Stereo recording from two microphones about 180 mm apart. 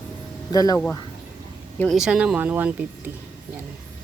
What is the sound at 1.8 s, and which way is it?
Speech, centre (ahead or behind).